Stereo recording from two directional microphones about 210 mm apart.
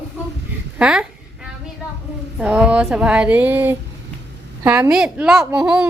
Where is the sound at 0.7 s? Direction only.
5° right (ahead or behind).